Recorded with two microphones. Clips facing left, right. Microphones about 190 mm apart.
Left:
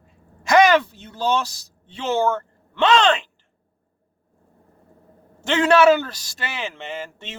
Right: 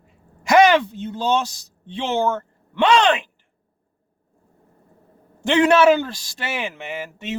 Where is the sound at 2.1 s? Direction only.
15° right (ahead or behind).